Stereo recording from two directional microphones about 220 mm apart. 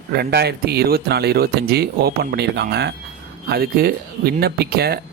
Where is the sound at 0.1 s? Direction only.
45° right (ahead or behind).